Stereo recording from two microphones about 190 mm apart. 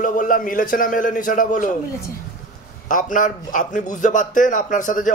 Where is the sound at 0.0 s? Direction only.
45° left (ahead or behind).